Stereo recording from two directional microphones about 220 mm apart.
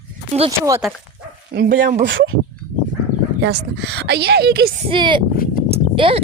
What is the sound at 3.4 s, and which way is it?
Speech, 50° right (ahead or behind).